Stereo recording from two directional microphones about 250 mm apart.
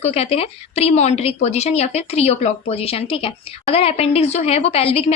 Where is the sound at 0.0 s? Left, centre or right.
Left.